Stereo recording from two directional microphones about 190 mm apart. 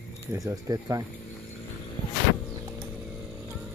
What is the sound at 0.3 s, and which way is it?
Speech, 15° right (ahead or behind).